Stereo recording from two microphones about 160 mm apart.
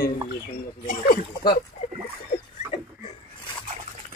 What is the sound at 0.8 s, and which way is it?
Speech, 65° left (ahead or behind).